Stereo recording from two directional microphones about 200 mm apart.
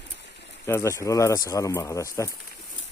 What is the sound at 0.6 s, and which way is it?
Speech, 15° left (ahead or behind).